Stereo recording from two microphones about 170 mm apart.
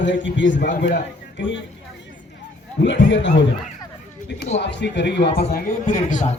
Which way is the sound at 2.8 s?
90° left.